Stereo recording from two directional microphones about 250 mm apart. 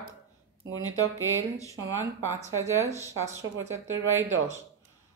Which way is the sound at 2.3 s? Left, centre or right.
Centre.